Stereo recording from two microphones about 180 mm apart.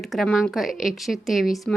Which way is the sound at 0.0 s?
Centre (ahead or behind).